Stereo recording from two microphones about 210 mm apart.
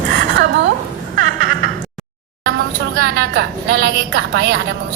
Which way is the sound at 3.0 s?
50° right (ahead or behind).